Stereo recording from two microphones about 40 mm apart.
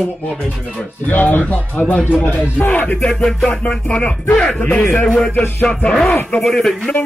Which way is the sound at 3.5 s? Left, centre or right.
Left.